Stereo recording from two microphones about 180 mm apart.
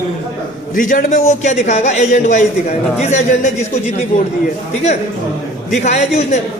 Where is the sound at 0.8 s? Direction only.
45° left (ahead or behind).